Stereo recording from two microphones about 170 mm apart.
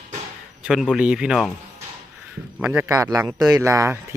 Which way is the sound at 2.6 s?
10° right (ahead or behind).